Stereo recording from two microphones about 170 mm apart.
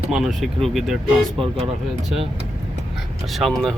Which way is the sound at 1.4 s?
30° right (ahead or behind).